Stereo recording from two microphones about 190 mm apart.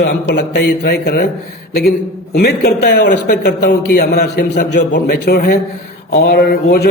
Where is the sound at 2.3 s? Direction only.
55° left (ahead or behind).